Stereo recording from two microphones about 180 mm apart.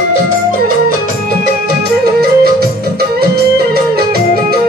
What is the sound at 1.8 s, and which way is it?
Music, 60° right (ahead or behind).